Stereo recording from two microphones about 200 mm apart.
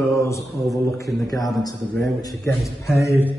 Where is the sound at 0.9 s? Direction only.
15° left (ahead or behind).